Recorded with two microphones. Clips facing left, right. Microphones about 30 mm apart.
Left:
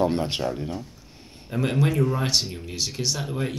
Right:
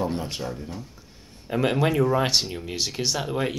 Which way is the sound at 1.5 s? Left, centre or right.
Right.